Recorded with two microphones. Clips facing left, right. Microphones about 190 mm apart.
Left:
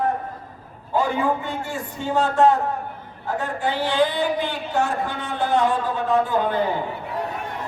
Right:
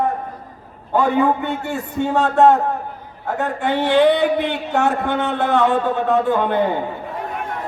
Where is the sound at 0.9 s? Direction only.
60° right (ahead or behind).